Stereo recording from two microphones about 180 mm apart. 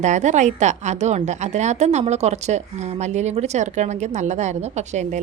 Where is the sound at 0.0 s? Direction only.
40° right (ahead or behind).